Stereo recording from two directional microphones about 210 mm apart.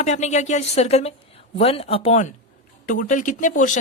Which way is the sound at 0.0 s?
35° left (ahead or behind).